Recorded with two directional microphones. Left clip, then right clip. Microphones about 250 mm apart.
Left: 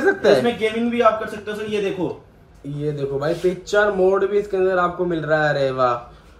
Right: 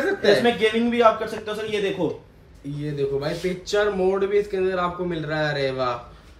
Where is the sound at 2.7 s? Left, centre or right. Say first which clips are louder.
Left 2 dB; centre.